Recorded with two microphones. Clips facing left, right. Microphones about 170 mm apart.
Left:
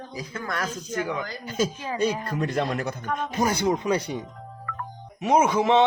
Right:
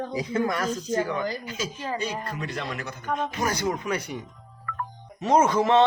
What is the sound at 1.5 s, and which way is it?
Speech, 50° left (ahead or behind).